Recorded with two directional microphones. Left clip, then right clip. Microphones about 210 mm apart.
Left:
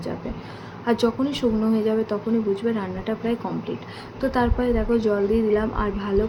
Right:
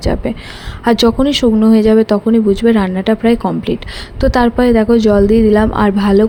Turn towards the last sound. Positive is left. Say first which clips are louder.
# right 12 dB
turn(degrees=-50)  # may be behind; listen again after turning